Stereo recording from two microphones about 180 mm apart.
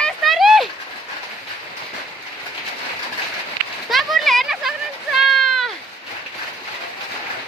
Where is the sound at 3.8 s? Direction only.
Centre (ahead or behind).